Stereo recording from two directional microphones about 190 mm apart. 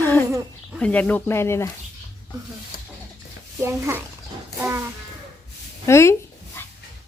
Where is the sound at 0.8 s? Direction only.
5° left (ahead or behind).